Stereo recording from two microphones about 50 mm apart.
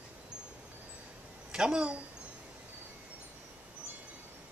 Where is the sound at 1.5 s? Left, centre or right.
Centre.